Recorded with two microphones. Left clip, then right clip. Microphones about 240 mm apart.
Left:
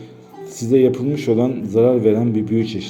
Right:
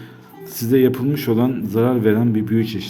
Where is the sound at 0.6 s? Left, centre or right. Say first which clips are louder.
Left 1 dB; right.